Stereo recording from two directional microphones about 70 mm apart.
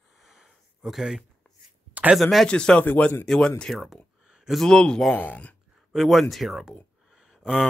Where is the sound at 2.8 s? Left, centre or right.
Left.